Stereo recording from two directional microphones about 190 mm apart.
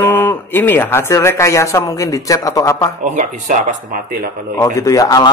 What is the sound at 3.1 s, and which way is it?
Speech, 45° right (ahead or behind).